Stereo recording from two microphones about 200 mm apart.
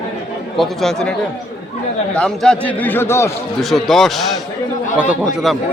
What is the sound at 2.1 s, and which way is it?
Speech, 5° left (ahead or behind).